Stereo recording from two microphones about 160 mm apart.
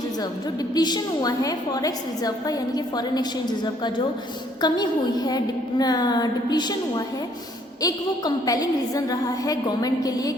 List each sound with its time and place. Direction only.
0.7 s a woman's voice: 25° left (ahead or behind)